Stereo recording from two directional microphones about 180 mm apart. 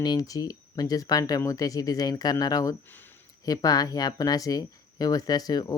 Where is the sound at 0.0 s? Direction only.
20° left (ahead or behind).